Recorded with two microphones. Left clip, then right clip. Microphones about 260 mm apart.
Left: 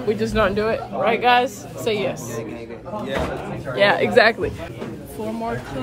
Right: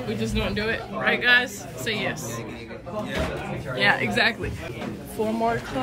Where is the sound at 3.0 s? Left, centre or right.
Centre.